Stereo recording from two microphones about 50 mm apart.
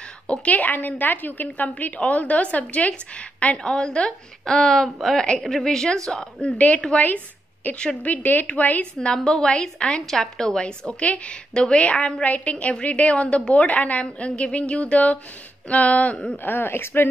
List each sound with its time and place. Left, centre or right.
0.3 s a woman's voice: left
7.7 s a woman's voice: left
9.0 s a woman's voice: centre
16.4 s speech: left